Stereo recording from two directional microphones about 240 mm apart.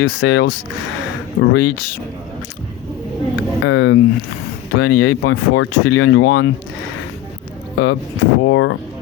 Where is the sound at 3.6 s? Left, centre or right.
Left.